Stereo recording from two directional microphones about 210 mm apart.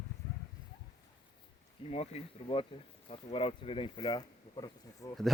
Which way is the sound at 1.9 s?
30° left (ahead or behind).